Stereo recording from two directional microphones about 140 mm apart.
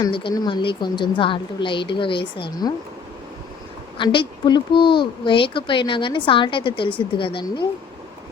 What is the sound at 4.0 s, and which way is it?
Speech, 35° left (ahead or behind).